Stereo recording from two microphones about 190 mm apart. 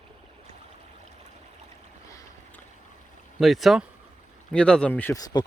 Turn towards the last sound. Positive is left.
turn(degrees=20)  # may be behind; listen again after turning